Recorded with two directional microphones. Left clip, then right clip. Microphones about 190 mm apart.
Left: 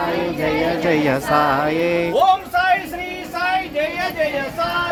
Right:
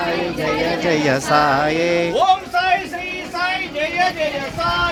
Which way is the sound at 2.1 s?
15° left (ahead or behind).